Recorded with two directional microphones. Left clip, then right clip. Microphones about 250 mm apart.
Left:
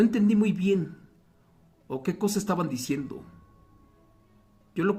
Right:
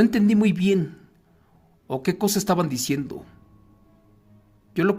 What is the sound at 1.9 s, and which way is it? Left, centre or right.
Speech, right.